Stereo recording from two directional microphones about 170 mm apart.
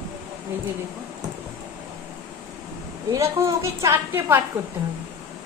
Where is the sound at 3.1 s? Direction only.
15° right (ahead or behind).